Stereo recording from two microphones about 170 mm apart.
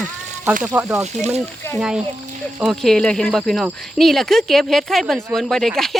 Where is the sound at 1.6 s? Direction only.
15° left (ahead or behind).